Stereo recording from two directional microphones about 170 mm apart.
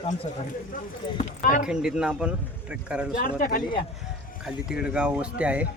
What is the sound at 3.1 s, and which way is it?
Speech, 60° left (ahead or behind).